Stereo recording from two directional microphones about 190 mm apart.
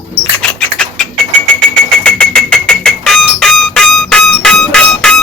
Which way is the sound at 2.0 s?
5° left (ahead or behind).